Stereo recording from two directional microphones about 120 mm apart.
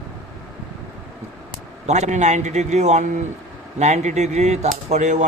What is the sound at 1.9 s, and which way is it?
A man's voice, 75° right (ahead or behind).